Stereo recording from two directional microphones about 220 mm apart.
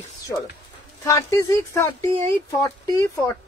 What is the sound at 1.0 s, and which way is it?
Speech, 15° left (ahead or behind).